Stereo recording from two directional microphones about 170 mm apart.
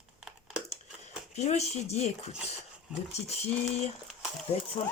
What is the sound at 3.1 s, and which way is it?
Speech, 40° left (ahead or behind).